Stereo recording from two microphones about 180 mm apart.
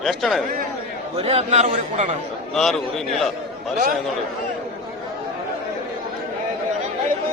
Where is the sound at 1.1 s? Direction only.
35° right (ahead or behind).